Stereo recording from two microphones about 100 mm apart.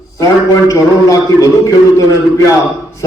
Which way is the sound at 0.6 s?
35° left (ahead or behind).